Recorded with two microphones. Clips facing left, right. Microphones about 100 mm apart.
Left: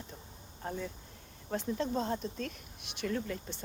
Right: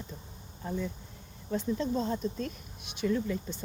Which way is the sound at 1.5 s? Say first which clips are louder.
Right 3 dB; 55° left (ahead or behind).